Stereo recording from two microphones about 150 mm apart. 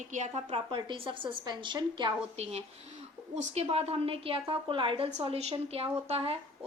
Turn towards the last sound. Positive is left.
turn(degrees=-40)  # may be behind; listen again after turning